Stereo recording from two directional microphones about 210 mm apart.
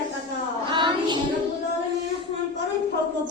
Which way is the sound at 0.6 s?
20° right (ahead or behind).